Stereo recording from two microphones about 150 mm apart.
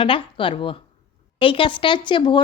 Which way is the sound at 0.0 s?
35° left (ahead or behind).